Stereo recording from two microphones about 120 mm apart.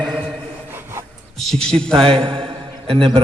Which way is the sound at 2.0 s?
45° right (ahead or behind).